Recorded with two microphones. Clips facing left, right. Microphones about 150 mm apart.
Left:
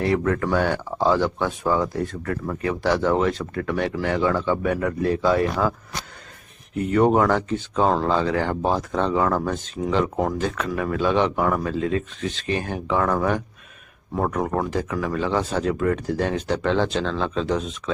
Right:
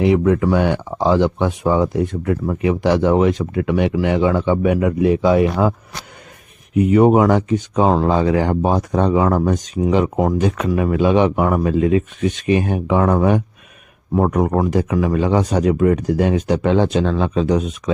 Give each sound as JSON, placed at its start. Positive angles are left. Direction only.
{"t": 0.0, "sound": "speech", "side_deg": -15}